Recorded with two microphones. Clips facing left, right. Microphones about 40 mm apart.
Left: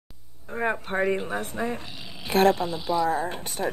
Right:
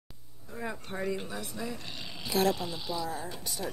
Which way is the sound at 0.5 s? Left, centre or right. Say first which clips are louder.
Left 11 dB; left.